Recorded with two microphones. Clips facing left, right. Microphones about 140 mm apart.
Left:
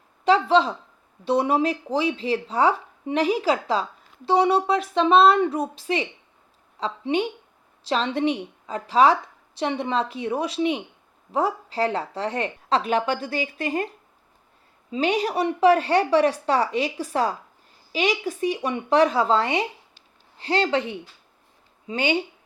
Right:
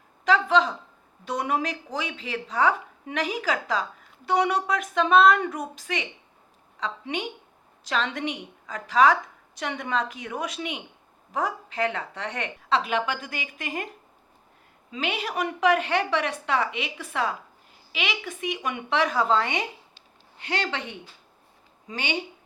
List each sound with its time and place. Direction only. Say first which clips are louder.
0.3 s a woman's voice: left 3 dB; 30° left (ahead or behind)